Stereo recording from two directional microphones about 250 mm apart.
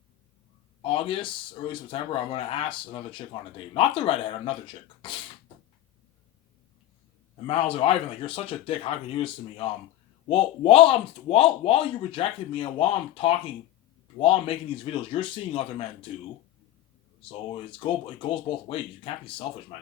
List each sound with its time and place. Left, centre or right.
0.8 s speech: left
7.4 s speech: left
17.2 s speech: left